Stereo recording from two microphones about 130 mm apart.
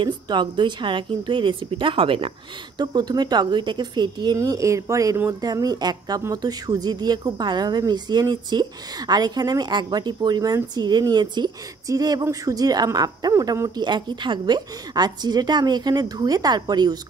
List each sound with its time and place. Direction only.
0.0 s speech: 35° right (ahead or behind)
2.8 s speech: 30° right (ahead or behind)
4.4 s speech: 25° right (ahead or behind)